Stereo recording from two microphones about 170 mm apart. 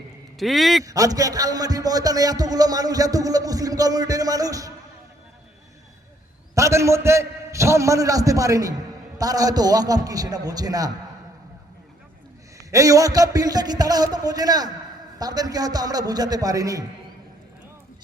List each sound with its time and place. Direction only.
0.3 s a man's voice: centre (ahead or behind)
0.9 s a man's voice: 20° right (ahead or behind)
6.5 s a man's voice: 15° right (ahead or behind)
12.7 s a man's voice: 20° right (ahead or behind)